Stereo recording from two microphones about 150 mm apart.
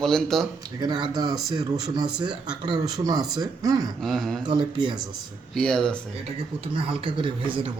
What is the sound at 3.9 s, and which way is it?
Speech, centre (ahead or behind).